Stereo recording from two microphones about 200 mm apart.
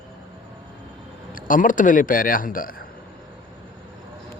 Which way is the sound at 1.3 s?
45° left (ahead or behind).